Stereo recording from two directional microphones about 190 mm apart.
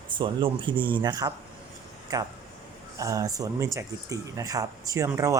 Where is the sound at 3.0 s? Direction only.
15° right (ahead or behind).